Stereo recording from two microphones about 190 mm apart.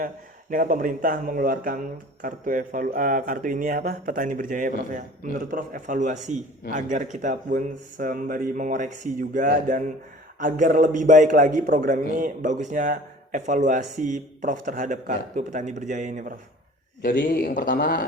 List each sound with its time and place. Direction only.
0.5 s a man's voice: 45° right (ahead or behind)
17.2 s speech: 45° left (ahead or behind)